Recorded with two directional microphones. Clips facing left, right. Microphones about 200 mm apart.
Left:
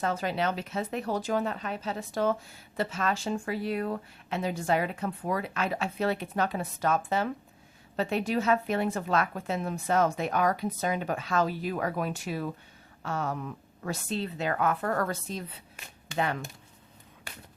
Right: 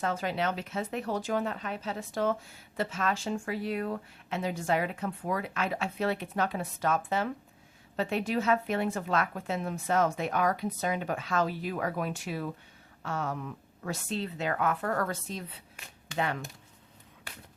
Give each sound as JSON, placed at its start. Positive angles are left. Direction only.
{"t": 0.0, "sound": "speech", "side_deg": 35}